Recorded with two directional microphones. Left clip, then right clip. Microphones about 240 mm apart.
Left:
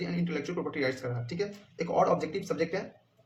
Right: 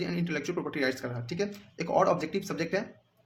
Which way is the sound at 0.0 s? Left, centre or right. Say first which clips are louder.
Right 2 dB; right.